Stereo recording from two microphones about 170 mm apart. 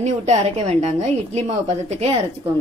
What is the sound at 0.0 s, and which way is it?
A woman's voice, 40° right (ahead or behind).